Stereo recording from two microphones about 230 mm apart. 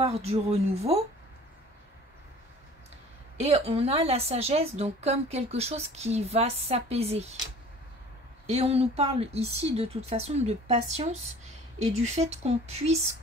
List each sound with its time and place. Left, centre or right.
0.0 s a woman's voice: right
3.4 s a woman's voice: right
8.5 s a woman's voice: right